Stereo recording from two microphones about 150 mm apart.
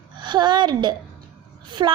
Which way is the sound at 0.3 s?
30° right (ahead or behind).